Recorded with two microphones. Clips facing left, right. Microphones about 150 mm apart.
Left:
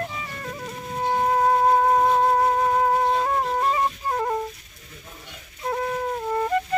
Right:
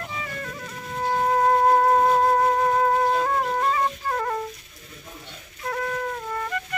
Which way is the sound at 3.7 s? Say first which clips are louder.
Left 1 dB; 20° left (ahead or behind).